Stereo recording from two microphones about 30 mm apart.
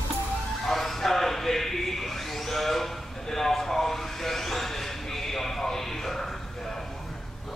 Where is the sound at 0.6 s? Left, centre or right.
Centre.